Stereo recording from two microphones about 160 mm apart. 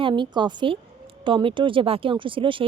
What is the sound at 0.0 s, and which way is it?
A woman's voice, 30° right (ahead or behind).